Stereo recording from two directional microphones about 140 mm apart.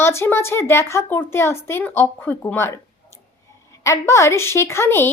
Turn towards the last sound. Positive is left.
turn(degrees=15)  # may be behind; listen again after turning